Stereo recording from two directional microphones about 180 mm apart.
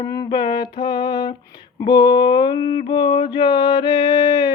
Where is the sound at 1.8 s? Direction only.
25° left (ahead or behind).